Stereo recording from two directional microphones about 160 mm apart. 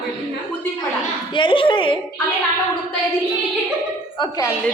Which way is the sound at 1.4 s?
30° left (ahead or behind).